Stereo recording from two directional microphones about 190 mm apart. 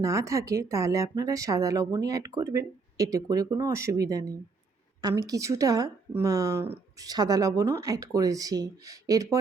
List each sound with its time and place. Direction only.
0.0 s a woman's voice: 15° right (ahead or behind)